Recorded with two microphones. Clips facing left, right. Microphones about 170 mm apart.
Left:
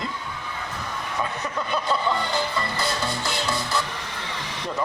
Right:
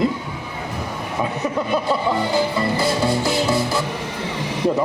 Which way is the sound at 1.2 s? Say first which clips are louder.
Right 10 dB; 20° right (ahead or behind).